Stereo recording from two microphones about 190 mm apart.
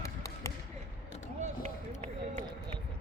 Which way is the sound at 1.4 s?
35° right (ahead or behind).